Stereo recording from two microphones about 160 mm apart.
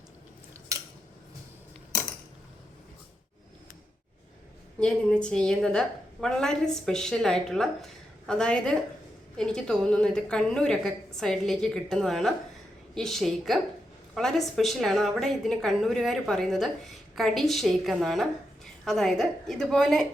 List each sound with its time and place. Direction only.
0.7 s scissors: 20° right (ahead or behind)
4.8 s a woman's voice: 5° left (ahead or behind)